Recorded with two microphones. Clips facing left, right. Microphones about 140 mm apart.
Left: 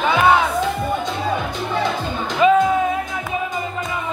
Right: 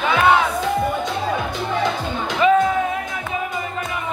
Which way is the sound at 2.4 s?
20° left (ahead or behind).